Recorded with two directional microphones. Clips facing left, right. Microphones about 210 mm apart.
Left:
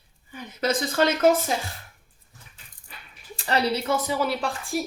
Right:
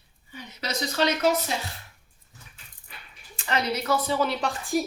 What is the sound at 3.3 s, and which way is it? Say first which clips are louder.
Speech: left 3 dB; 35° left (ahead or behind).